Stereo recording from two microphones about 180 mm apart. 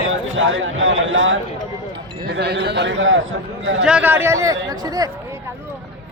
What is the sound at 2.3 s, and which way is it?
A man's voice, 65° right (ahead or behind).